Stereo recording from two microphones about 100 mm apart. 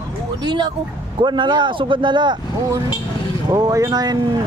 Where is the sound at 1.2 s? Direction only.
50° right (ahead or behind).